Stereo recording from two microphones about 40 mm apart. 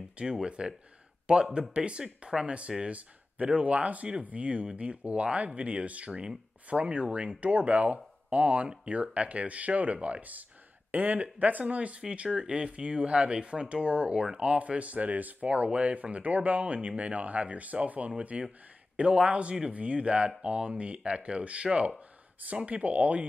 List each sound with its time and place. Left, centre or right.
0.2 s speech: right